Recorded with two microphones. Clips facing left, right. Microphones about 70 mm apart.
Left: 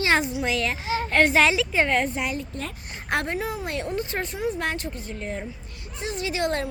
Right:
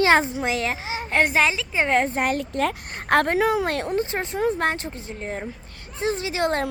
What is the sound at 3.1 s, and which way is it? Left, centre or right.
Speech, right.